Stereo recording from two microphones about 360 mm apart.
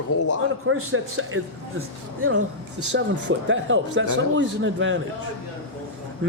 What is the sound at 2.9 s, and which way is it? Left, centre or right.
A man's voice, right.